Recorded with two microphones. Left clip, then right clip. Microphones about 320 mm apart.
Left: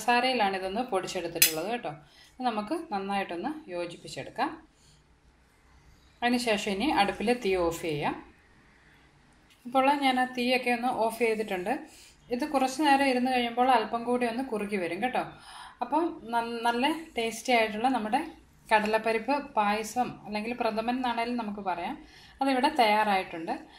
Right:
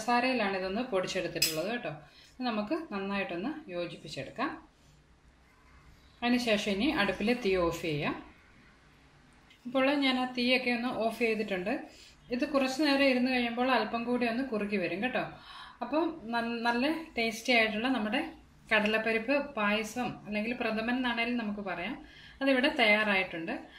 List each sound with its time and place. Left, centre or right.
0.0 s speech: left
6.1 s speech: left
9.7 s a woman's voice: centre